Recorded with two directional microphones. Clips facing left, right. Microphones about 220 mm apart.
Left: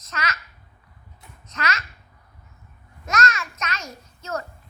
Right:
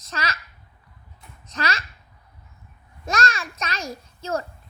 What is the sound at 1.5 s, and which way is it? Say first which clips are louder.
Speech: right 1 dB; 30° right (ahead or behind).